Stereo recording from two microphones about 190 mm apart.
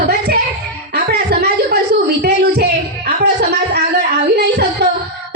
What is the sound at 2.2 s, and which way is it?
Music, 60° right (ahead or behind).